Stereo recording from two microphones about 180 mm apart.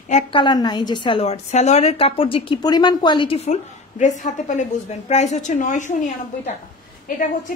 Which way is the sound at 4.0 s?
45° left (ahead or behind).